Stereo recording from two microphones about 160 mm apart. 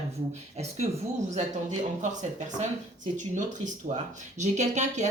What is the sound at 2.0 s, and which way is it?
Speech, 50° right (ahead or behind).